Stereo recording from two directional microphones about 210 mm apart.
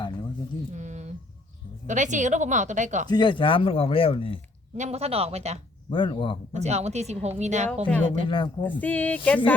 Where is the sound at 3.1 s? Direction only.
20° left (ahead or behind).